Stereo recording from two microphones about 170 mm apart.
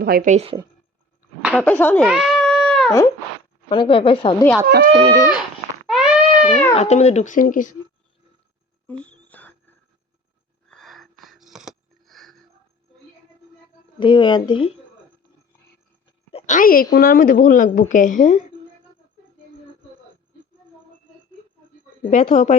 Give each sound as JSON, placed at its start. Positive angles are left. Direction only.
{"t": 0.0, "sound": "a woman's voice", "side_deg": -55}
{"t": 1.5, "sound": "speech", "side_deg": 10}
{"t": 2.0, "sound": "cat", "side_deg": 0}
{"t": 3.7, "sound": "speech", "side_deg": 30}
{"t": 4.6, "sound": "speech", "side_deg": -65}
{"t": 4.9, "sound": "a sound", "side_deg": -25}
{"t": 5.2, "sound": "a sound", "side_deg": -5}
{"t": 6.7, "sound": "speech", "side_deg": 40}
{"t": 8.9, "sound": "a sound", "side_deg": 5}
{"t": 14.0, "sound": "speech", "side_deg": 30}
{"t": 16.3, "sound": "a sound", "side_deg": 50}
{"t": 16.9, "sound": "speech", "side_deg": 65}
{"t": 22.0, "sound": "speech", "side_deg": 40}